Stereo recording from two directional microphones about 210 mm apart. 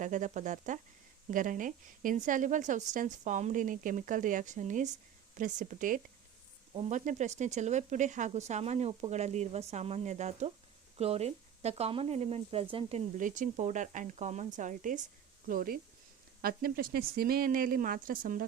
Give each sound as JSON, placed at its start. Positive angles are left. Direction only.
{"t": 0.0, "sound": "speech", "side_deg": -35}